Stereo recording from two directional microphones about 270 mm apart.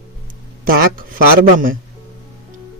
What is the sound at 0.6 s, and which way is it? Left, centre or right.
Speech, right.